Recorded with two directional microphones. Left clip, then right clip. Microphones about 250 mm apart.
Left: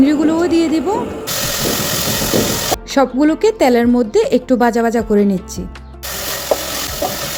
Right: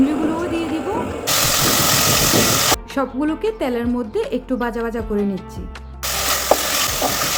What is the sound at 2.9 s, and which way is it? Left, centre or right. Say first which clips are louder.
A woman's voice: left 8 dB; left.